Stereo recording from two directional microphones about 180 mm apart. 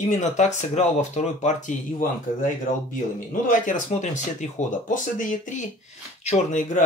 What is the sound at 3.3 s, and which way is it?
Speech, 45° left (ahead or behind).